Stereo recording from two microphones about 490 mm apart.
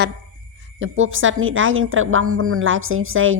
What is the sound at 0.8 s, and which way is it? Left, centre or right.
A woman's voice, right.